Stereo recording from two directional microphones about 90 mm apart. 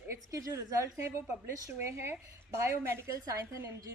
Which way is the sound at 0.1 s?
35° right (ahead or behind).